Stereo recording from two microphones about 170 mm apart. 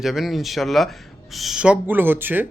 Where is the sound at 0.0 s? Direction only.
Centre (ahead or behind).